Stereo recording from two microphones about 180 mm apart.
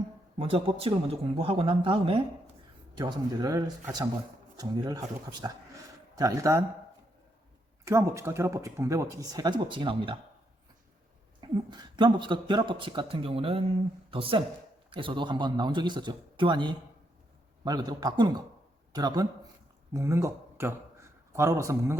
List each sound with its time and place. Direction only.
0.3 s speech: 30° right (ahead or behind); by 6.6 s 15° right (ahead or behind)
7.9 s speech: 15° right (ahead or behind)
11.3 s speech: 25° right (ahead or behind)